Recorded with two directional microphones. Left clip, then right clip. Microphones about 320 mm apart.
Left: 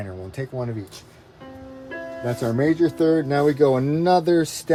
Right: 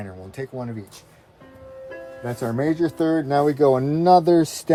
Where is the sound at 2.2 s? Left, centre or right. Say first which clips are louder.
Left 2 dB; centre.